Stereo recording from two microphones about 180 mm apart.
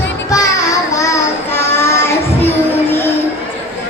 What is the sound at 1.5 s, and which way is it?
Child singing, 15° left (ahead or behind).